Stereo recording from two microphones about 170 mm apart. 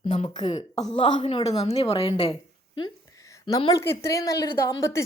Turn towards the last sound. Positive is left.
turn(degrees=20)  # may be behind; listen again after turning